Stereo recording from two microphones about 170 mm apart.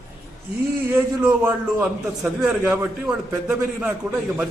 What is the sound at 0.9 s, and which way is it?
A man's voice, 15° right (ahead or behind).